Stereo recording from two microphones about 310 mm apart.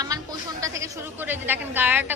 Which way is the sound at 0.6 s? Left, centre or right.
Centre.